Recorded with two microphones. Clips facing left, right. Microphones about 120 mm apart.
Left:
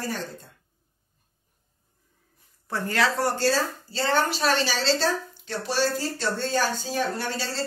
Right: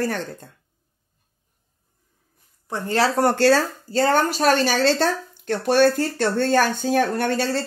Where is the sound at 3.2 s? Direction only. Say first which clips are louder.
Right 7 dB; 65° right (ahead or behind).